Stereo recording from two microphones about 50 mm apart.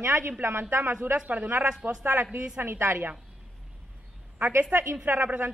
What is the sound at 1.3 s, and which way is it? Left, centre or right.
A man's voice, right.